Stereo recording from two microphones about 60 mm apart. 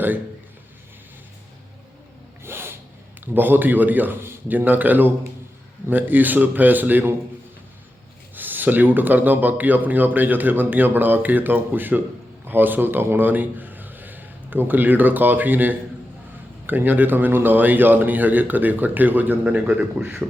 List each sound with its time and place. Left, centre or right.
2.4 s sneeze: right
3.3 s speech: right
8.4 s a man's voice: right